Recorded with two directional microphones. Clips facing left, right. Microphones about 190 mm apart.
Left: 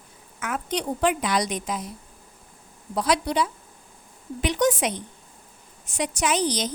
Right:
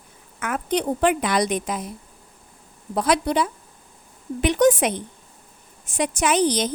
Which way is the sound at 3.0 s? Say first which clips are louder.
Right 3 dB; 55° right (ahead or behind).